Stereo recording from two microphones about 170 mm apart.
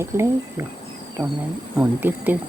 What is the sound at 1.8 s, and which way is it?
Speech, 10° right (ahead or behind).